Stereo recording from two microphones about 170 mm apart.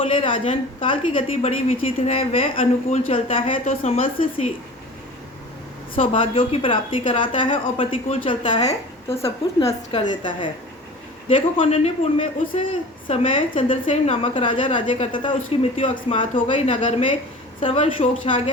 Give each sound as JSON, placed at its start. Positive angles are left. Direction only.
{"t": 0.0, "sound": "a woman's voice", "side_deg": 35}
{"t": 6.0, "sound": "a woman's voice", "side_deg": 35}
{"t": 9.2, "sound": "a woman's voice", "side_deg": 20}